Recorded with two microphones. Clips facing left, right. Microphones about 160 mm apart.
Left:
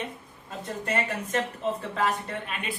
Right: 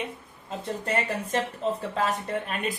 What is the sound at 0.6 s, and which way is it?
Speech, 35° right (ahead or behind).